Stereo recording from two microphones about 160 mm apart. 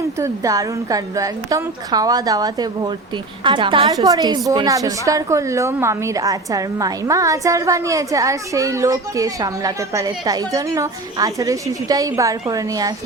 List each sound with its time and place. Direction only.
0.2 s a woman's voice: 20° right (ahead or behind)